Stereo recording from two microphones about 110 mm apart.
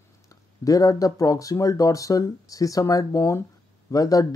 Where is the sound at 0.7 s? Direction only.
35° left (ahead or behind).